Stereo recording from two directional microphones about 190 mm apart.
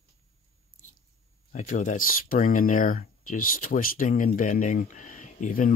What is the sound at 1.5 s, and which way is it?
Speech, 40° left (ahead or behind).